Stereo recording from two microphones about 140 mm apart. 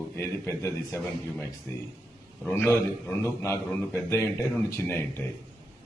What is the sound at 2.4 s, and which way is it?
Speech, 15° left (ahead or behind).